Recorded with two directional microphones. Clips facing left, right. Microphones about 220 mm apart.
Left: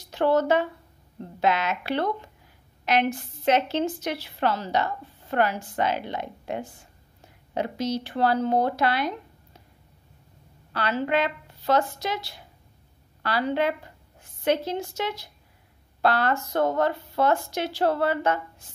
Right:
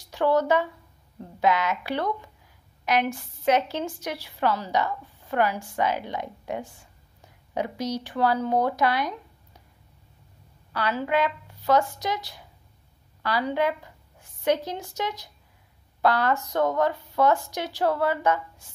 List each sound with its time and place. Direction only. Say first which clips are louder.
0.1 s speech: left 1 dB; 15° right (ahead or behind)
7.5 s speech: left 1 dB; 15° right (ahead or behind)
10.7 s speech: left 1 dB; 10° right (ahead or behind)